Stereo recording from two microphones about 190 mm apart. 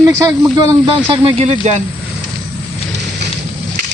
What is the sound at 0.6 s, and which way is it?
Speech, 30° right (ahead or behind).